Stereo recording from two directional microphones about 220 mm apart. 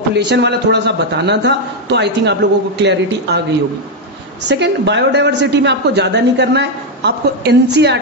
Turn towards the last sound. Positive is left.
turn(degrees=-50)  # may be behind; listen again after turning